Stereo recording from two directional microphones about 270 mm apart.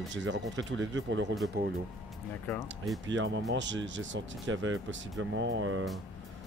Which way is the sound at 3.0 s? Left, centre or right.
Right.